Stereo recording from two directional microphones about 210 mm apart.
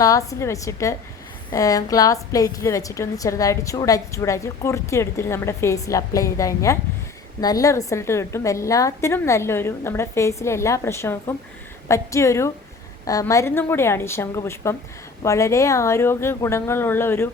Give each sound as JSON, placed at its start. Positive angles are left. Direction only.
{"t": 0.0, "sound": "a woman's voice", "side_deg": 15}